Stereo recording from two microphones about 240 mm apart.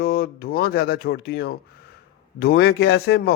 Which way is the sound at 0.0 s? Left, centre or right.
Left.